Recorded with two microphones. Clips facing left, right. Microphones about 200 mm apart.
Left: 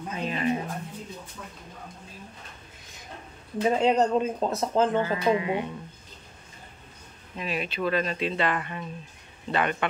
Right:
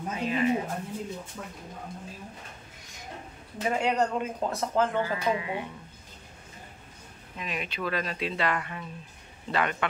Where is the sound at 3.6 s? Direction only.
25° left (ahead or behind).